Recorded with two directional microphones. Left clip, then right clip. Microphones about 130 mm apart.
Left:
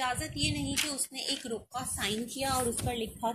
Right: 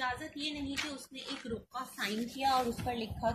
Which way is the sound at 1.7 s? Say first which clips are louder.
Left 3 dB; 30° left (ahead or behind).